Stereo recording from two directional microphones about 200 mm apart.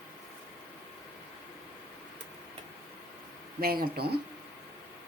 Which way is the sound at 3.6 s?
50° right (ahead or behind).